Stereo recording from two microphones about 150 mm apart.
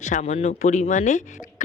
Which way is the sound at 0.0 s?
55° left (ahead or behind).